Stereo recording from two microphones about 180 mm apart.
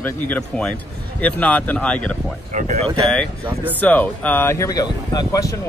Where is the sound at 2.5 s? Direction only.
40° right (ahead or behind).